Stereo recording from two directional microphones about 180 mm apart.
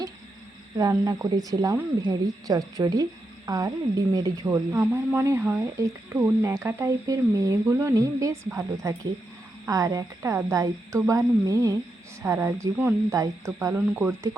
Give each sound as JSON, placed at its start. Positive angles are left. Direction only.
{"t": 0.8, "sound": "speech", "side_deg": -20}